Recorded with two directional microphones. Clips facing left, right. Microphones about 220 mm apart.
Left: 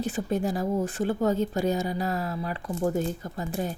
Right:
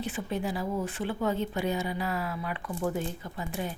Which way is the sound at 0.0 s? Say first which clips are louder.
Left 5 dB; 45° left (ahead or behind).